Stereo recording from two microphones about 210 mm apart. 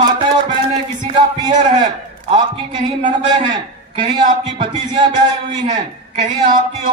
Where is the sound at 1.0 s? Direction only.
25° right (ahead or behind).